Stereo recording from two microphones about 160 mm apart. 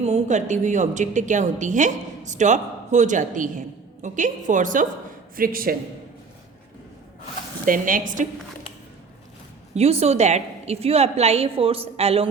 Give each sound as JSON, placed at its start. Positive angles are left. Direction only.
{"t": 0.0, "sound": "a woman's voice", "side_deg": -45}
{"t": 5.4, "sound": "a woman's voice", "side_deg": -65}
{"t": 7.6, "sound": "a woman's voice", "side_deg": -60}
{"t": 9.7, "sound": "a woman's voice", "side_deg": -40}